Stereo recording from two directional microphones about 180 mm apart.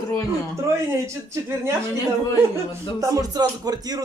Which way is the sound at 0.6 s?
15° right (ahead or behind).